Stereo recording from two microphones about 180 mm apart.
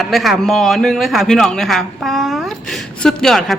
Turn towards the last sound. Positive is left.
turn(degrees=0)  # may be behind; listen again after turning